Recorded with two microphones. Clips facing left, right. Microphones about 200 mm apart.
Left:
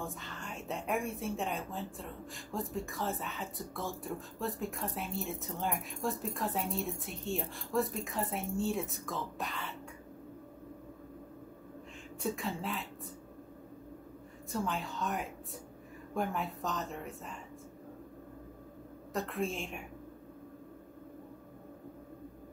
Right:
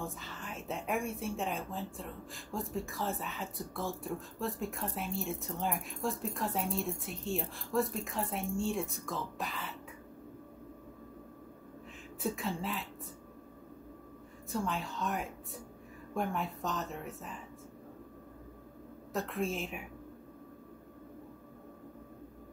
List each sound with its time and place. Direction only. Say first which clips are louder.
0.0 s a woman's voice: even; centre (ahead or behind)
12.2 s a woman's voice: right 1 dB; centre (ahead or behind)
14.5 s a woman's voice: even; centre (ahead or behind)
19.1 s a woman's voice: even; centre (ahead or behind)